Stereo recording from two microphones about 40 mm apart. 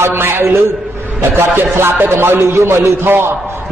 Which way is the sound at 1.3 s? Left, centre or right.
Right.